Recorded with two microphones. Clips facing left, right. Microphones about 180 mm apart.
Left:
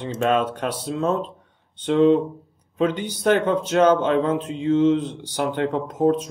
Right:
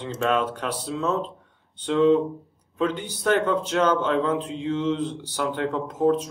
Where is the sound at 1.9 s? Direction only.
25° left (ahead or behind).